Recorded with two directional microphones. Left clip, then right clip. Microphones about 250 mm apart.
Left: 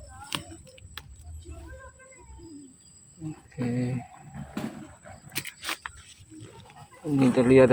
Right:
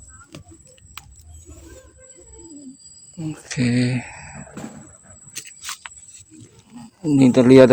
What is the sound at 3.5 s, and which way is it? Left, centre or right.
Speech, right.